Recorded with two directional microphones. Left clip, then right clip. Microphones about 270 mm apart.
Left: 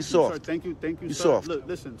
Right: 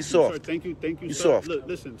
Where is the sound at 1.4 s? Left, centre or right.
Centre.